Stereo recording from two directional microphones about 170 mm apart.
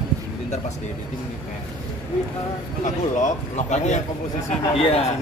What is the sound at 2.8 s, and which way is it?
A man's voice, 45° left (ahead or behind).